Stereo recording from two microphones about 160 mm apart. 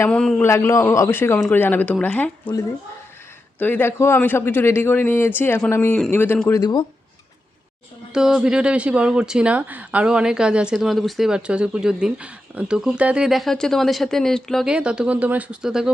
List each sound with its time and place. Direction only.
0.0 s a man's voice: 5° left (ahead or behind)
0.4 s a man's voice: 15° left (ahead or behind)
3.6 s a man's voice: 10° left (ahead or behind)
6.5 s speech: 25° left (ahead or behind)
8.1 s speech: 5° right (ahead or behind)